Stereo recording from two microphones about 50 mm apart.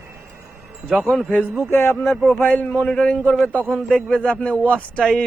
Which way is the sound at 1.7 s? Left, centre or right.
Left.